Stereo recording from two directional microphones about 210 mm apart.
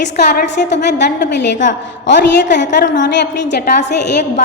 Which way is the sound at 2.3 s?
55° left (ahead or behind).